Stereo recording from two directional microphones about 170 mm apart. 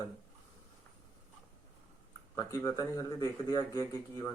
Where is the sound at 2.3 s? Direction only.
20° left (ahead or behind).